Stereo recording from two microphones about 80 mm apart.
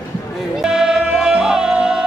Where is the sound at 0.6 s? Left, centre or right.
Centre.